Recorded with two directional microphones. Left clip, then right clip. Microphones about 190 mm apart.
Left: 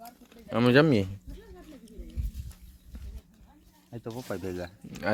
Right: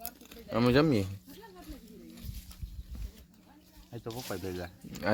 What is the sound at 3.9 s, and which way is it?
Speech, 30° left (ahead or behind).